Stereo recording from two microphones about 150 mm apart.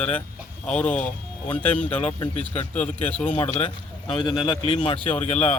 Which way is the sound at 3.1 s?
10° left (ahead or behind).